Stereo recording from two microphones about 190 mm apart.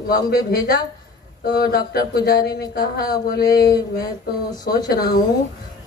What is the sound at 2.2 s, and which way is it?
Speech, 50° left (ahead or behind).